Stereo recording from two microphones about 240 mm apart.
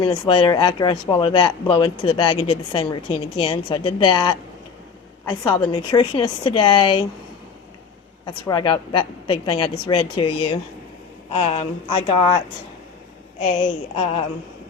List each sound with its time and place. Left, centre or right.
0.0 s speech: left
8.2 s speech: centre
13.4 s speech: left